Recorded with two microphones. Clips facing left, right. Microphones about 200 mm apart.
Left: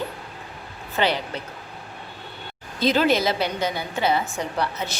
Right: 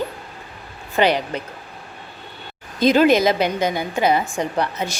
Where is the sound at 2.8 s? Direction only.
15° right (ahead or behind).